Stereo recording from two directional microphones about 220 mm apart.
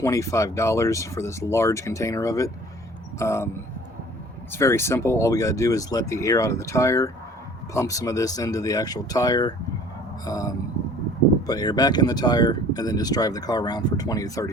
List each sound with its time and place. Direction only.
0.0 s speech: 15° left (ahead or behind)
4.5 s speech: 10° left (ahead or behind)